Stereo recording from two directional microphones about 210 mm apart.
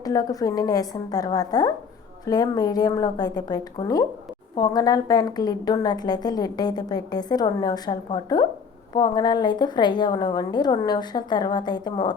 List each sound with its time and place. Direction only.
0.0 s a woman's voice: 15° left (ahead or behind)